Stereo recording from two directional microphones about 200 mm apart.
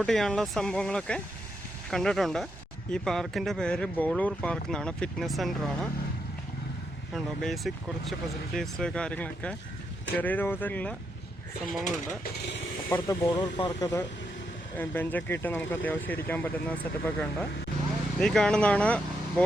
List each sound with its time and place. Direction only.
0.0 s speech: 5° left (ahead or behind)
7.1 s speech: centre (ahead or behind)
12.9 s speech: 20° left (ahead or behind)